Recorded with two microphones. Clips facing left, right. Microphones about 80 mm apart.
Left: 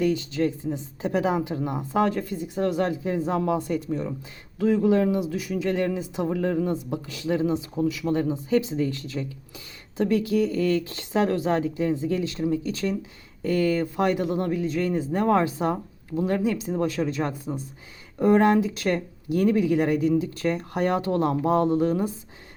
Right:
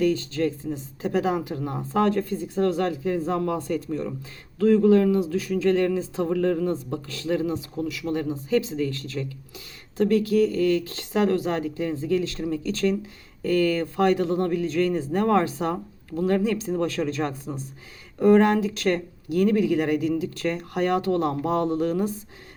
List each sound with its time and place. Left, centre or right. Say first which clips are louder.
0.0 s speech: right 1 dB; centre